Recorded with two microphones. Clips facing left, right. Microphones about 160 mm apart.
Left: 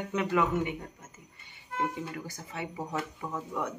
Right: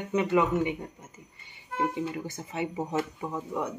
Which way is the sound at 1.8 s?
15° right (ahead or behind).